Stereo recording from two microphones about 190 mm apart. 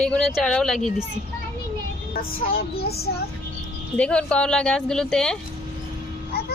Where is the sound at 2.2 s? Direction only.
50° left (ahead or behind).